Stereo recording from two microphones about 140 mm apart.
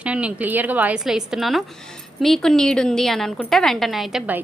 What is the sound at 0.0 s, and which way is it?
A woman's voice, 10° right (ahead or behind).